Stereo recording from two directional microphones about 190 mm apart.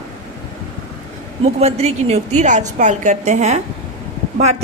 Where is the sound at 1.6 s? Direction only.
35° right (ahead or behind).